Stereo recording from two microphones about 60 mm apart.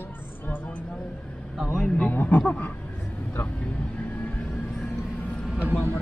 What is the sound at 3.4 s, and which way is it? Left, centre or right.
Vehicle, left.